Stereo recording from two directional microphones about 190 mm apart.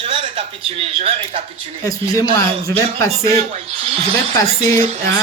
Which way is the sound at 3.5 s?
30° right (ahead or behind).